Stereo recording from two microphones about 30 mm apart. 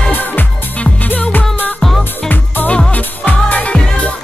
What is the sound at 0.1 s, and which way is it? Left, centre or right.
Music, left.